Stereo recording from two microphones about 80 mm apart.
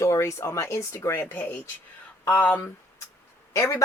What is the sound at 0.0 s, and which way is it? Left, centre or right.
Speech, left.